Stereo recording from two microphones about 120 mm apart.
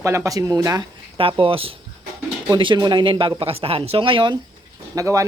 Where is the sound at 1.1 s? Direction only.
50° right (ahead or behind).